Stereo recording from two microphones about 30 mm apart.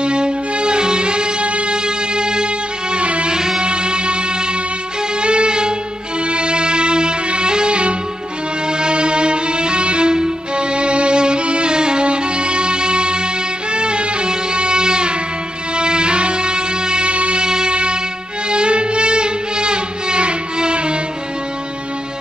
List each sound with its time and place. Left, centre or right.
0.0 s music: right
2.9 s music: right
3.3 s music: right
5.2 s music: right
17.1 s music: right
17.4 s music: right